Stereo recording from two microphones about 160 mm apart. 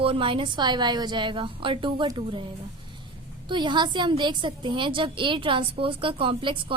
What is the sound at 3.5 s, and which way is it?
A woman's voice, 30° right (ahead or behind).